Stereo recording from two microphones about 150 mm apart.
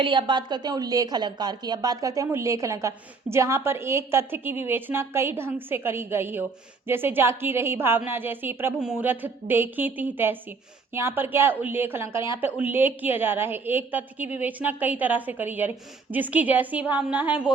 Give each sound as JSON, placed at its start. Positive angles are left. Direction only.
{"t": 0.0, "sound": "a woman's voice", "side_deg": -35}